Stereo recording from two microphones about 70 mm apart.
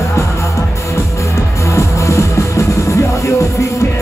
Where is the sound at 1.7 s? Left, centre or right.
Left.